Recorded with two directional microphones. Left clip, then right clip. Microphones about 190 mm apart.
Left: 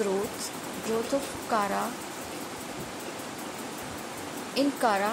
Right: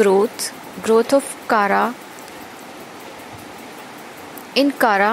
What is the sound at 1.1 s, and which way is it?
Speech, 35° right (ahead or behind).